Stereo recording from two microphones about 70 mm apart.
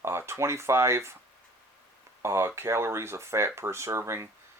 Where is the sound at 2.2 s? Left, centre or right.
Right.